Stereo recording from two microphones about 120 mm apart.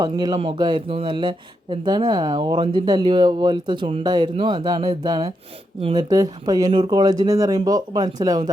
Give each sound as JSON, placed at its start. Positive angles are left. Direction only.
{"t": 0.0, "sound": "speech", "side_deg": -35}
{"t": 0.3, "sound": "speech", "side_deg": -45}